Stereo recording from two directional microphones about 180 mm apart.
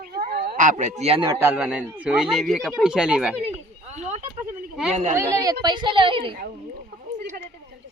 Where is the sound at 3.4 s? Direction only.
35° right (ahead or behind).